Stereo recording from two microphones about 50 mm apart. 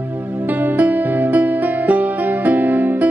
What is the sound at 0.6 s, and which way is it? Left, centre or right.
Music, right.